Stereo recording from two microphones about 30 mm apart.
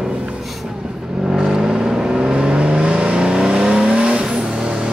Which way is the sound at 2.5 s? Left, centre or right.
Right.